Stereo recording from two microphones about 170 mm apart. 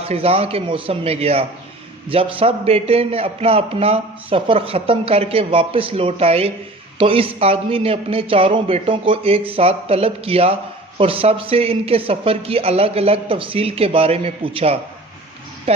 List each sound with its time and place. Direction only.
0.0 s speech: 35° right (ahead or behind)